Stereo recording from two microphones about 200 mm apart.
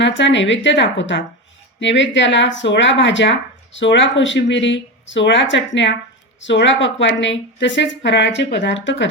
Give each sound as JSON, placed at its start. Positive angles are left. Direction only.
{"t": 0.0, "sound": "speech", "side_deg": 65}